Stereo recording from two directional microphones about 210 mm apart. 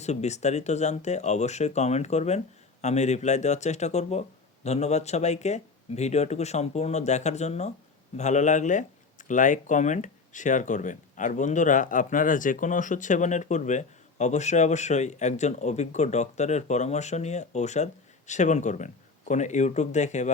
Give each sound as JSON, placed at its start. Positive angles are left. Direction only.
{"t": 0.0, "sound": "speech", "side_deg": 30}